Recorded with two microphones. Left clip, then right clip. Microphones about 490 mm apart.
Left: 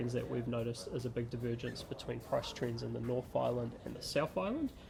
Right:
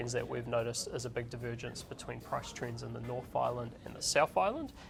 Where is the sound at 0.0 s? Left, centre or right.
Right.